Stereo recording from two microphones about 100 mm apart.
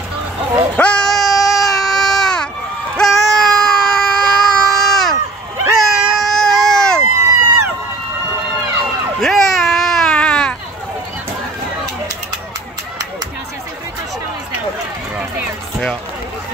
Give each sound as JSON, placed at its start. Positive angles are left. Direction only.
{"t": 0.7, "sound": "baby cry", "side_deg": 10}
{"t": 7.0, "sound": "run", "side_deg": -30}
{"t": 9.2, "sound": "baby cry", "side_deg": 5}
{"t": 15.1, "sound": "run", "side_deg": -15}